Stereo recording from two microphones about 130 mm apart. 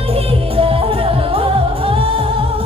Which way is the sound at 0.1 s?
45° right (ahead or behind).